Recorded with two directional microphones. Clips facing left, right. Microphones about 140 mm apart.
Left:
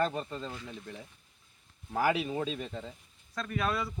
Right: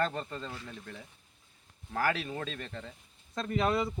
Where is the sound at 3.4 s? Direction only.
25° right (ahead or behind).